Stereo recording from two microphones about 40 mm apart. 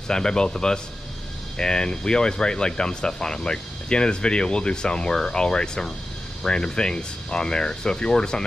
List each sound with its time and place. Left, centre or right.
0.1 s speech: centre